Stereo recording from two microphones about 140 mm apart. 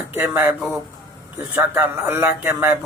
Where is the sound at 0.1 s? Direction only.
15° right (ahead or behind).